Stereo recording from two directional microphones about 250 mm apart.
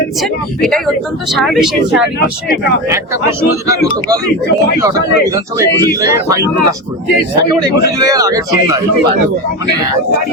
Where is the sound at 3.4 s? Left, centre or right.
Centre.